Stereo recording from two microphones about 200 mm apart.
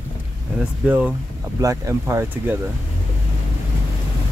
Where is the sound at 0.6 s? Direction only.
5° right (ahead or behind).